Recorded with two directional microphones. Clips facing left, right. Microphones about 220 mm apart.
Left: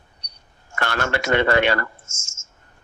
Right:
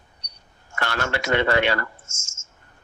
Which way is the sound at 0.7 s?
55° left (ahead or behind).